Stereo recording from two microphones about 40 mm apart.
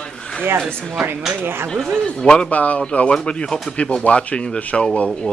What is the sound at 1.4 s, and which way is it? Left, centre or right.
Speech, right.